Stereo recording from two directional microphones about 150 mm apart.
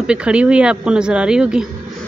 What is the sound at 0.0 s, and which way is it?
Speech, 5° right (ahead or behind).